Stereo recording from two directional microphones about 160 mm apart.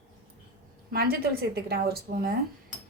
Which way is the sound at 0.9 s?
75° right (ahead or behind).